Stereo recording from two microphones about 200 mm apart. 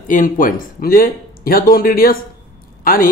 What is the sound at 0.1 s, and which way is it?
Speech, 45° left (ahead or behind).